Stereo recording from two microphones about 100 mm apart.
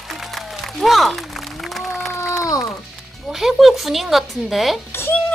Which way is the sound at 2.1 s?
25° left (ahead or behind).